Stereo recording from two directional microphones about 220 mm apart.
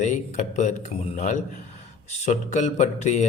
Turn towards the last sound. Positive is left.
turn(degrees=35)  # may be behind; listen again after turning